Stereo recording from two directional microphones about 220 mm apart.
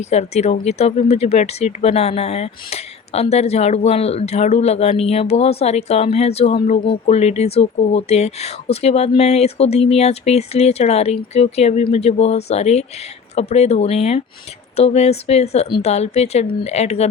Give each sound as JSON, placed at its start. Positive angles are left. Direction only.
{"t": 0.0, "sound": "speech", "side_deg": 30}